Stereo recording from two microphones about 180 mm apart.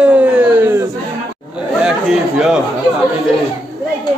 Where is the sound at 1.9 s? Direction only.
5° right (ahead or behind).